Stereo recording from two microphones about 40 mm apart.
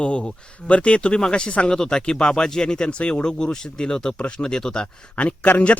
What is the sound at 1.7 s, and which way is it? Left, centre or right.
Speech, centre.